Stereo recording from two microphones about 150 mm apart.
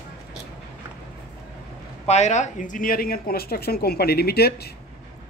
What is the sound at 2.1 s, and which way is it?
Speech, 50° left (ahead or behind).